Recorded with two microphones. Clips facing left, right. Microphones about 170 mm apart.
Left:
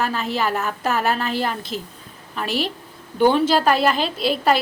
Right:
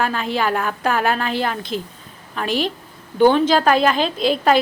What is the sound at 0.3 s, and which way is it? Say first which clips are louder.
A woman's voice: right 2 dB; 5° left (ahead or behind).